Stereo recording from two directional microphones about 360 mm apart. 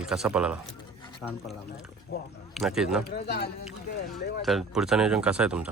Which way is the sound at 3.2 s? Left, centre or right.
Left.